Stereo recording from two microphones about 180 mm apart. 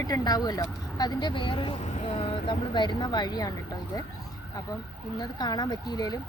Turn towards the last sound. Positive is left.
turn(degrees=20)  # may be behind; listen again after turning